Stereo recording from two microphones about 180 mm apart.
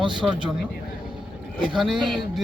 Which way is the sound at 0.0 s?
25° right (ahead or behind).